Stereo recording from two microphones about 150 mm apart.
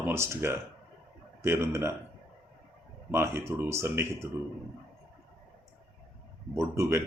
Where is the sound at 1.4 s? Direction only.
20° right (ahead or behind).